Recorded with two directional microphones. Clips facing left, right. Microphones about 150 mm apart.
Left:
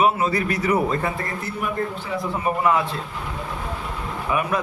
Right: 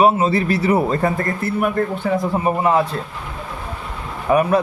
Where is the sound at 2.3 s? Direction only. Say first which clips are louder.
Right 2 dB; 30° right (ahead or behind).